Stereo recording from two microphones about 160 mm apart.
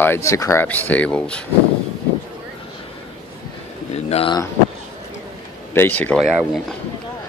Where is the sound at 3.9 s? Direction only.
40° left (ahead or behind).